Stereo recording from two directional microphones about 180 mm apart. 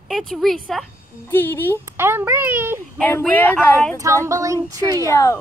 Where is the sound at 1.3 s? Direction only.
10° left (ahead or behind).